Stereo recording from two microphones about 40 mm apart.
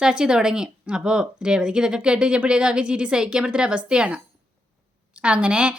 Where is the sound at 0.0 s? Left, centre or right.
Right.